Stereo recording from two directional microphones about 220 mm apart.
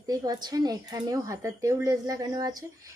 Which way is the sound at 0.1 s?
15° right (ahead or behind).